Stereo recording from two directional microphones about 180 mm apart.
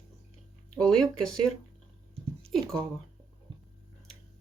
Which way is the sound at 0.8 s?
5° left (ahead or behind).